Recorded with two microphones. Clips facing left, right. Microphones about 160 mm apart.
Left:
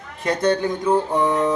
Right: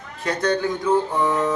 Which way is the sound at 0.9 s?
15° left (ahead or behind).